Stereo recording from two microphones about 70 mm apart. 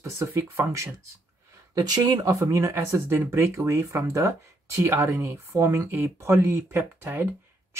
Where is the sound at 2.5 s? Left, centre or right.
Right.